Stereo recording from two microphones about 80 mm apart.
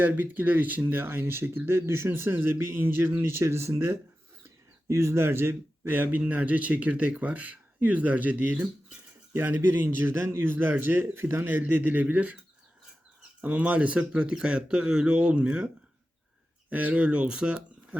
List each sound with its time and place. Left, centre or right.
0.0 s speech: right
13.4 s speech: centre